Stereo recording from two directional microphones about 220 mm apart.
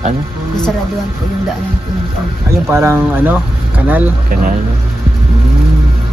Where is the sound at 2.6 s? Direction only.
10° right (ahead or behind).